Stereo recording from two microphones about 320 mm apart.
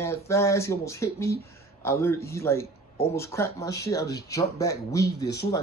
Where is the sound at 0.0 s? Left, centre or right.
Centre.